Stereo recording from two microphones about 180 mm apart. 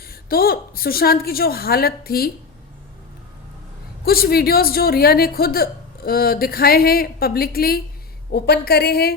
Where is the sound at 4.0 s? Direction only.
60° left (ahead or behind).